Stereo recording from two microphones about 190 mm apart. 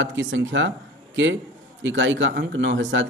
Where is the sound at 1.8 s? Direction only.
75° right (ahead or behind).